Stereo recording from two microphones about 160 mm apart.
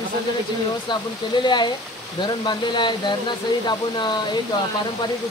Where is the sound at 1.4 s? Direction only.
30° left (ahead or behind).